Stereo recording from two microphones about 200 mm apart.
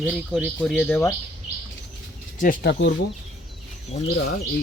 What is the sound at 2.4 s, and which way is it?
Speech, 45° left (ahead or behind).